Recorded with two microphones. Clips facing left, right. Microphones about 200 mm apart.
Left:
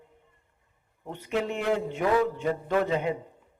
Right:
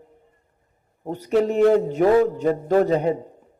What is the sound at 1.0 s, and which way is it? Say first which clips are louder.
Speech: right 9 dB; 40° right (ahead or behind).